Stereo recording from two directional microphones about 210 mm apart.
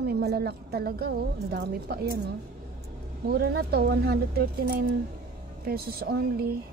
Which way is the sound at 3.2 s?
45° right (ahead or behind).